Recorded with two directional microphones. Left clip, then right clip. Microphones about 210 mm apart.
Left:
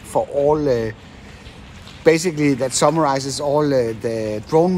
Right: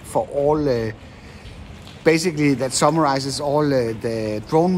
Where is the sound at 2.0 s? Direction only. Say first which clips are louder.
Left 2 dB; 5° right (ahead or behind).